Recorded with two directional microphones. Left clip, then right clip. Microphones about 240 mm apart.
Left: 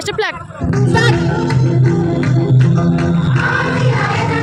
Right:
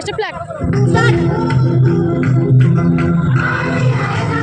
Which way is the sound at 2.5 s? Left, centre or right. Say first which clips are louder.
Even; centre.